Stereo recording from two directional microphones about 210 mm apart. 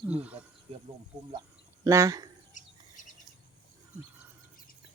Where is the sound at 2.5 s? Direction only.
35° left (ahead or behind).